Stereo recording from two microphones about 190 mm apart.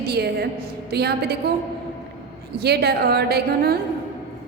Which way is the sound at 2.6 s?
55° right (ahead or behind).